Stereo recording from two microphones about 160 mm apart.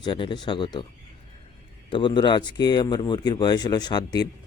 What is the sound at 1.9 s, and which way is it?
Speech, 30° left (ahead or behind).